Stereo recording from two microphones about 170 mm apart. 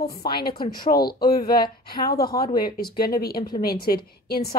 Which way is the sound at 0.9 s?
65° left (ahead or behind).